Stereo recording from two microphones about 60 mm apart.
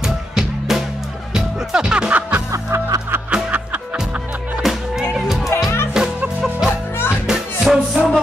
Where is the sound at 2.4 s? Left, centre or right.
Right.